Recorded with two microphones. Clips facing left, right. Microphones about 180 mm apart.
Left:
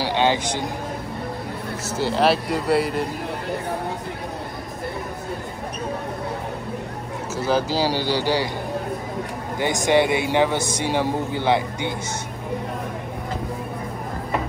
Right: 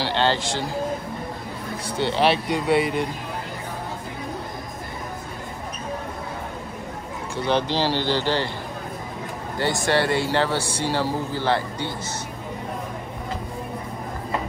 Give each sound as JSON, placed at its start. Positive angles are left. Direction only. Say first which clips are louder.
{"t": 0.0, "sound": "a sound", "louder": "left 2 dB", "side_deg": 15}
{"t": 2.0, "sound": "speech", "louder": "left 1 dB", "side_deg": 0}
{"t": 7.3, "sound": "a man's voice", "louder": "left 1 dB", "side_deg": 5}
{"t": 9.6, "sound": "a man's voice", "louder": "left 3 dB", "side_deg": 15}